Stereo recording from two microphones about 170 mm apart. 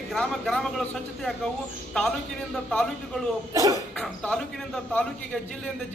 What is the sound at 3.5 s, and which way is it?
Speech, 20° right (ahead or behind).